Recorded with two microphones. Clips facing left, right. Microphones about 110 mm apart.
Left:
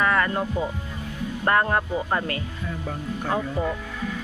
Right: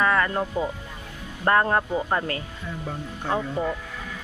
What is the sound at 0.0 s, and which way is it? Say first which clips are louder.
Music: even; 10° right (ahead or behind).